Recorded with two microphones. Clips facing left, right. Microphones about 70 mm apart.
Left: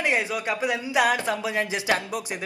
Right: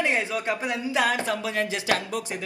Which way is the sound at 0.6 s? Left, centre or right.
Centre.